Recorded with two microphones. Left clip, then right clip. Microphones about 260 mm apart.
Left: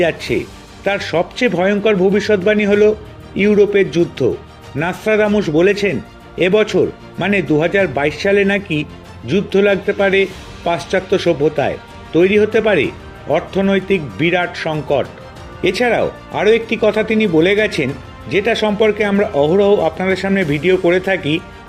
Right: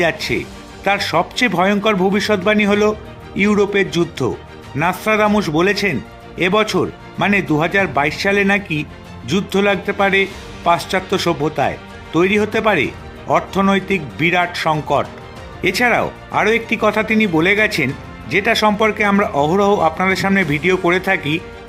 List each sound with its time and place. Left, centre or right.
0.0 s speech: centre